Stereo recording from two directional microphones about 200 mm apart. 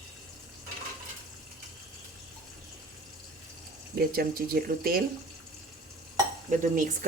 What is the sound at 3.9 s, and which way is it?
Speech, 50° right (ahead or behind).